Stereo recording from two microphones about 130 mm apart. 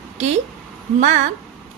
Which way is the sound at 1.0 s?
65° right (ahead or behind).